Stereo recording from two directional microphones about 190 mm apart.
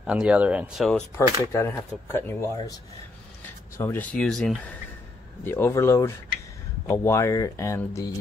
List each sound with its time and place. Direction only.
0.0 s speech: 5° right (ahead or behind)
1.5 s speech: 15° left (ahead or behind)